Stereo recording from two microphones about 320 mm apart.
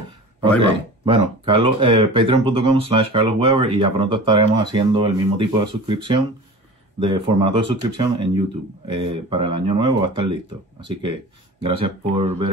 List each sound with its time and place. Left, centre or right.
1.0 s speech: centre
11.6 s speech: centre